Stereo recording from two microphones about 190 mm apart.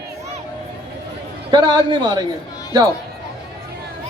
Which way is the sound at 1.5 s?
25° right (ahead or behind).